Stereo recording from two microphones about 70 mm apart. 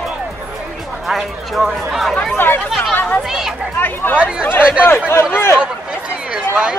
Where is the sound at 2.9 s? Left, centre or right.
Left.